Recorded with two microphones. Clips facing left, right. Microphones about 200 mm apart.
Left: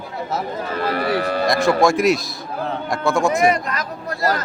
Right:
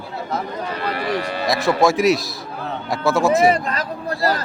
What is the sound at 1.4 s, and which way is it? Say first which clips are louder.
A man's voice: even; centre (ahead or behind).